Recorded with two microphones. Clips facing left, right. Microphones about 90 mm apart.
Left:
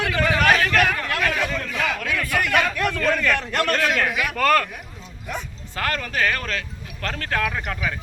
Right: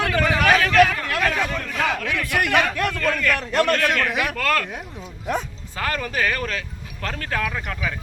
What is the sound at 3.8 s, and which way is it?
Speech, 55° right (ahead or behind).